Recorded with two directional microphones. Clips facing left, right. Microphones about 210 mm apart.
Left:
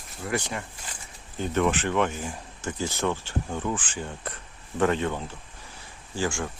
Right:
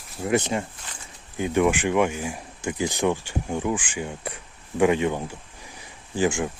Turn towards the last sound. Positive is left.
turn(degrees=-20)  # may be behind; listen again after turning